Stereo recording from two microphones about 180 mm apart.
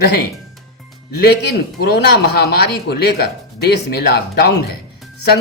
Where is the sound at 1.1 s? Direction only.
65° left (ahead or behind).